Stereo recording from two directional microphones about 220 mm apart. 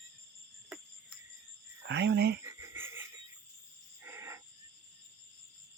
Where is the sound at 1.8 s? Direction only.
55° right (ahead or behind).